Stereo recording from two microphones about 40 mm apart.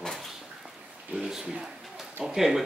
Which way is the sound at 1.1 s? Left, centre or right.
Centre.